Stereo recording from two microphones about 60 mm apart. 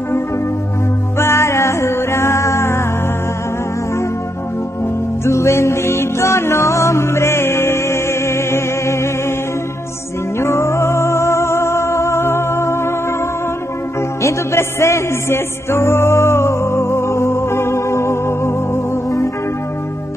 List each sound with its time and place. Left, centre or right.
1.1 s music: left
5.2 s music: left
10.4 s music: left
14.2 s music: left